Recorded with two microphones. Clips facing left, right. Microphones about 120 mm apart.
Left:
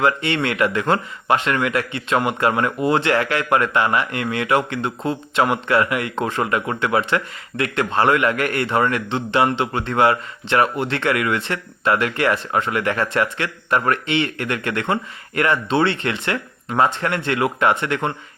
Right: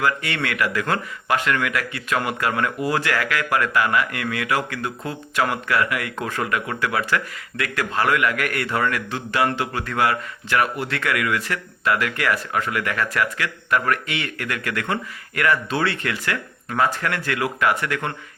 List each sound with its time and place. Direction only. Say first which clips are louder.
0.0 s speech: left 4 dB; 25° left (ahead or behind)